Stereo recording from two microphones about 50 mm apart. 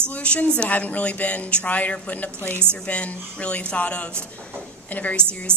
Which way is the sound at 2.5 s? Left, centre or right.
Right.